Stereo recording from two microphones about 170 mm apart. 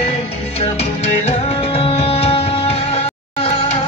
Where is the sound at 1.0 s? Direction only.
40° left (ahead or behind).